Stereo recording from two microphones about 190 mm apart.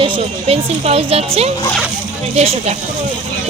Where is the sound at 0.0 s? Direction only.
30° right (ahead or behind).